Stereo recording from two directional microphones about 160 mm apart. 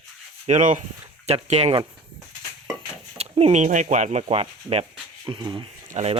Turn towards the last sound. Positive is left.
turn(degrees=-45)  # may be behind; listen again after turning